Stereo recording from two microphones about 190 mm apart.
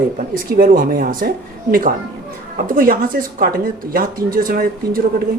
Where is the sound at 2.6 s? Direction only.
50° right (ahead or behind).